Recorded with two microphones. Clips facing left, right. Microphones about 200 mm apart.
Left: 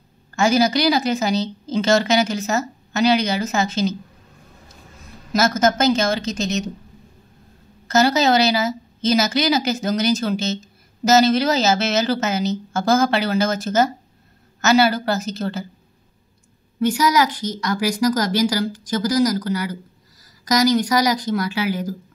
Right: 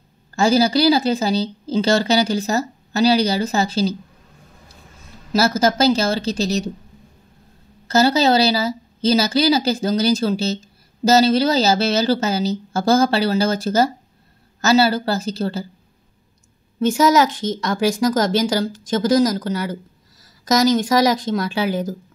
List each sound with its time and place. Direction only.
0.4 s a woman's voice: 30° right (ahead or behind)
5.3 s a woman's voice: 30° right (ahead or behind)
7.9 s a woman's voice: 30° right (ahead or behind)
17.1 s speech: 25° right (ahead or behind)